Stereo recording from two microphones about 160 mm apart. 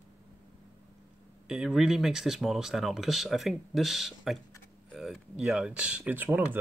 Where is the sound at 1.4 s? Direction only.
5° right (ahead or behind).